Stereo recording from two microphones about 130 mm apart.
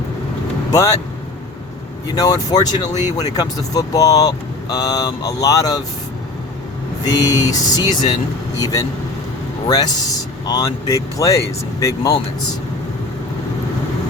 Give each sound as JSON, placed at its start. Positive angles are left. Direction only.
{"t": 0.7, "sound": "speech", "side_deg": 25}
{"t": 2.1, "sound": "speech", "side_deg": 30}
{"t": 7.0, "sound": "a man's voice", "side_deg": 30}